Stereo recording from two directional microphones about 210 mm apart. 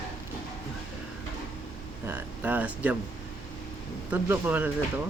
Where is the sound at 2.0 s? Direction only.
10° right (ahead or behind).